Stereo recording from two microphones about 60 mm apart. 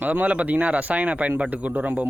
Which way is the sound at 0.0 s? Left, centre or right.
Right.